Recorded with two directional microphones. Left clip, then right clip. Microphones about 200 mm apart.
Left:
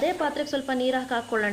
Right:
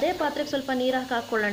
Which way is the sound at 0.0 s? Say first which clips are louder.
Even; centre (ahead or behind).